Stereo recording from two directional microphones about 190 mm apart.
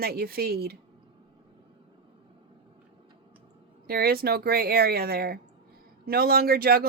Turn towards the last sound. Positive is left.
turn(degrees=-55)  # may be behind; listen again after turning